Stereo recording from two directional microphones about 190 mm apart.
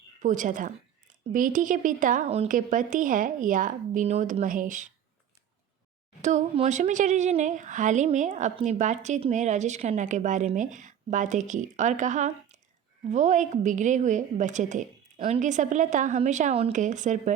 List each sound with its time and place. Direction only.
0.2 s a woman's voice: 40° right (ahead or behind)
6.2 s a woman's voice: 40° right (ahead or behind)